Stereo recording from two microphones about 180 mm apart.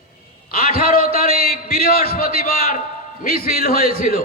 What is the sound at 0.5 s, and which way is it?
A man's voice, 55° left (ahead or behind).